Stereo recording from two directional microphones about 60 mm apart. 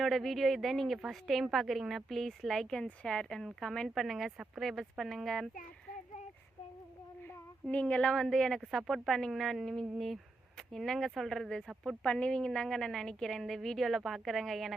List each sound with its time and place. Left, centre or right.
0.0 s a woman's voice: centre
7.7 s a woman's voice: left
8.2 s a woman's voice: centre